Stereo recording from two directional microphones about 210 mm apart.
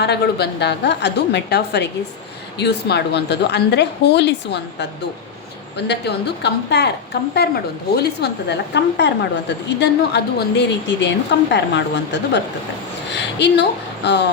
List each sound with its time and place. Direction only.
0.0 s a woman's voice: 50° left (ahead or behind)